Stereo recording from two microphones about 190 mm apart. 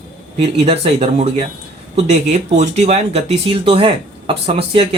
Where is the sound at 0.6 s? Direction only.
35° right (ahead or behind).